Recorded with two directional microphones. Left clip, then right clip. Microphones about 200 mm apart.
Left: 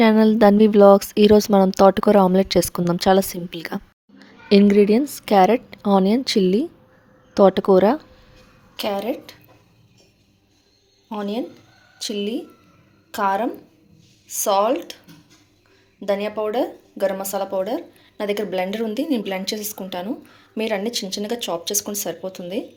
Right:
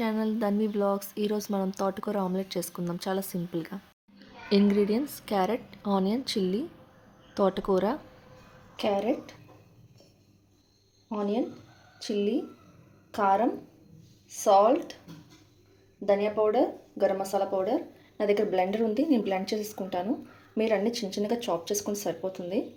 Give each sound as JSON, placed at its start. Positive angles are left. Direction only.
{"t": 0.0, "sound": "a woman's voice", "side_deg": 50}
{"t": 8.7, "sound": "a woman's voice", "side_deg": 0}
{"t": 11.1, "sound": "a woman's voice", "side_deg": 5}
{"t": 16.0, "sound": "a woman's voice", "side_deg": 10}